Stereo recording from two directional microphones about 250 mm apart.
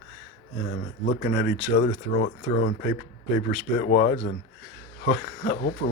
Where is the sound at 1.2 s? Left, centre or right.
Left.